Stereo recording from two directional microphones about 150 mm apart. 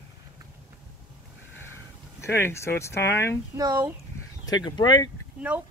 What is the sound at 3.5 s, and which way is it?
Speech, 25° right (ahead or behind).